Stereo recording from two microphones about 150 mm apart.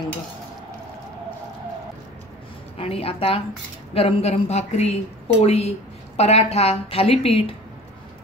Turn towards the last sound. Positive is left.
turn(degrees=40)  # may be behind; listen again after turning